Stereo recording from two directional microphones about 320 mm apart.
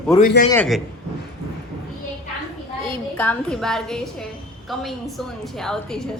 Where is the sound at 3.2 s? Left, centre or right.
Centre.